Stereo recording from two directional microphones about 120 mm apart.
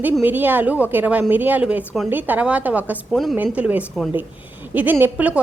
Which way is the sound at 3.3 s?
10° right (ahead or behind).